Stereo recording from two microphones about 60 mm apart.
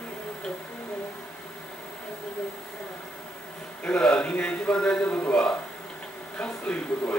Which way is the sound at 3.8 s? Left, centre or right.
Centre.